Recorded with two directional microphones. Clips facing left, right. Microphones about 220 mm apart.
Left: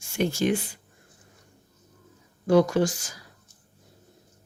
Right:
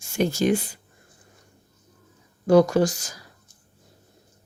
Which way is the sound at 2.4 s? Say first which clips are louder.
Right 3 dB; 40° right (ahead or behind).